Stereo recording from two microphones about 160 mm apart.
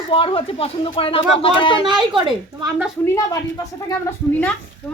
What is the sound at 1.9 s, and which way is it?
Speech, 30° right (ahead or behind).